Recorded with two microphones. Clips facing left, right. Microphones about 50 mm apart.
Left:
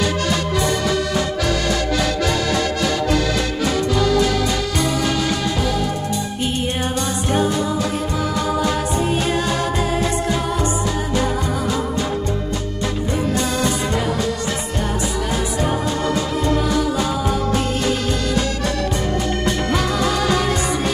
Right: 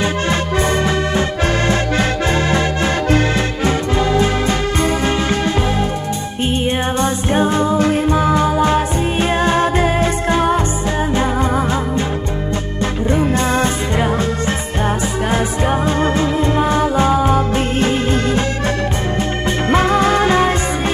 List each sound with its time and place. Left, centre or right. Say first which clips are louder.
0.0 s music: right 2 dB; right
5.0 s music: right 3 dB; right
12.8 s music: right 6 dB; right